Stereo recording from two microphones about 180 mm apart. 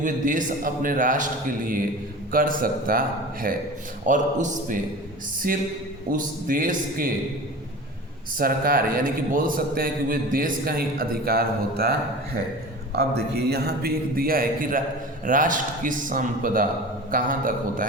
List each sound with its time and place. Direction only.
0.0 s a man's voice: 45° right (ahead or behind)
4.0 s a man's voice: 45° right (ahead or behind)
8.4 s a man's voice: 55° right (ahead or behind)